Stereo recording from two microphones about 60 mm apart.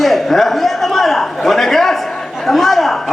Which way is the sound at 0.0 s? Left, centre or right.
Centre.